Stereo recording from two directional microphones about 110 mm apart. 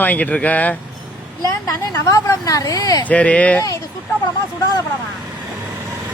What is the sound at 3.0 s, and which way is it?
Speech, 10° left (ahead or behind).